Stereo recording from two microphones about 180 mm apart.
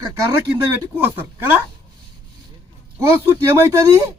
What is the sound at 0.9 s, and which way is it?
Speech, 10° right (ahead or behind).